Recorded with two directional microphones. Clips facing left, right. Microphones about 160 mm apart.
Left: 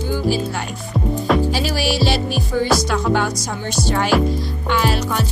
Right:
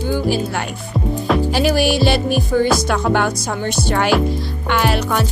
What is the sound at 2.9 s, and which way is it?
Speech, 60° right (ahead or behind).